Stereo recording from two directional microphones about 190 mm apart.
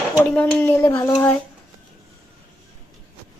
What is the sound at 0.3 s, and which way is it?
Speech, 5° left (ahead or behind).